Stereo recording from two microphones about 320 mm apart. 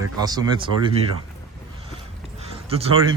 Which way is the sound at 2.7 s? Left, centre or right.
Centre.